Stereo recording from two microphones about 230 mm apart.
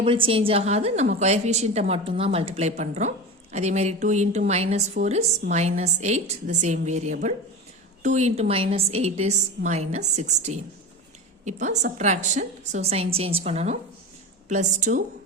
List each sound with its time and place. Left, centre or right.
0.0 s a woman's voice: right
11.9 s a woman's voice: right